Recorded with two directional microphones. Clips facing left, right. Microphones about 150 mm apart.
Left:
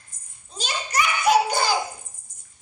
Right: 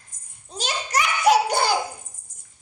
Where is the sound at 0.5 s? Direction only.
85° right; by 1.7 s 65° right (ahead or behind).